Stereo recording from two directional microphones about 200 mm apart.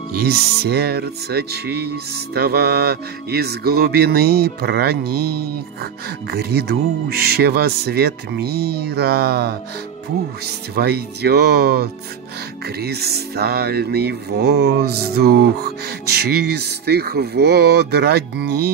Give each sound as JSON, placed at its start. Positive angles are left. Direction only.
{"t": 0.2, "sound": "speech", "side_deg": -55}